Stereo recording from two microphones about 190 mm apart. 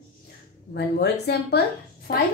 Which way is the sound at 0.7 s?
60° left (ahead or behind).